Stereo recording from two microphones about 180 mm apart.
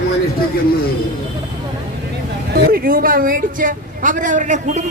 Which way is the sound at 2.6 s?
55° right (ahead or behind).